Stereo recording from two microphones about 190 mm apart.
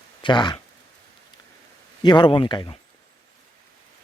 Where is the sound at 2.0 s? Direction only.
25° left (ahead or behind).